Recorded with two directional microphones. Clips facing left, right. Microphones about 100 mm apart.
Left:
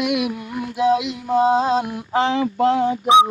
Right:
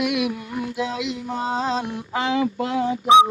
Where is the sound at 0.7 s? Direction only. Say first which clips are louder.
Left 11 dB; 30° left (ahead or behind).